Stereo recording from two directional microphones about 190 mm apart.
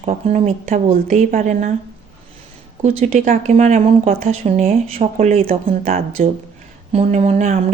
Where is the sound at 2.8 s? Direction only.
35° right (ahead or behind).